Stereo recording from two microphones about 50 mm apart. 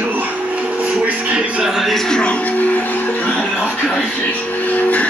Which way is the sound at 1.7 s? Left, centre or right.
Centre.